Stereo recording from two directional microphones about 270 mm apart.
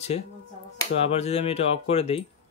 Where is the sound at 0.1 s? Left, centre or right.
Left.